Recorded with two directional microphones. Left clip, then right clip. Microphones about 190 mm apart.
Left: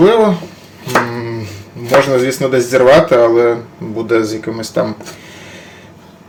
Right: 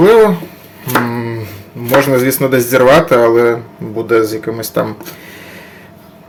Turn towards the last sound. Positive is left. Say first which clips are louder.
# right 1 dB
turn(degrees=-15)  # may be behind; listen again after turning